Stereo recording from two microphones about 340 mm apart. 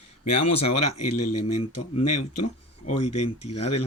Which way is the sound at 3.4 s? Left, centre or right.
Centre.